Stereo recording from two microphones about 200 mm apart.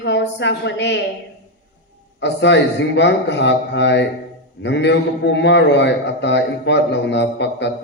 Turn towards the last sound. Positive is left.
turn(degrees=60)  # may be behind; listen again after turning